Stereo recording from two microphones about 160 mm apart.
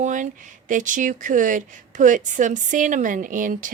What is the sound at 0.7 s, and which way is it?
A woman's voice, 55° right (ahead or behind).